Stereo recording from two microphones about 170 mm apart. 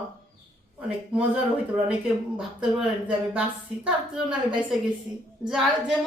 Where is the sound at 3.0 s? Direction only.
5° right (ahead or behind).